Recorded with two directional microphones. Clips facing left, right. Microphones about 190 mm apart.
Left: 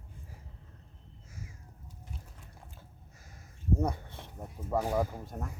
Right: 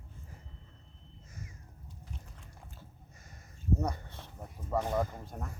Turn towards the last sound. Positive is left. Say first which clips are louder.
# left 2 dB
turn(degrees=5)  # may be behind; listen again after turning